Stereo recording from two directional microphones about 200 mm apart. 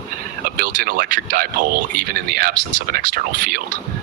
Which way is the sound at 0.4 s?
45° right (ahead or behind).